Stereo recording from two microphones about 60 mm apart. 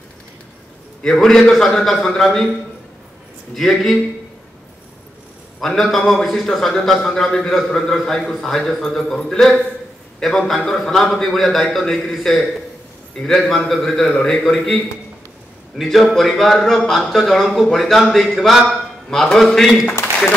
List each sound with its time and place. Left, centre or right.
1.0 s a man's voice: centre
3.5 s a man's voice: centre
5.6 s a man's voice: centre
15.8 s a man's voice: centre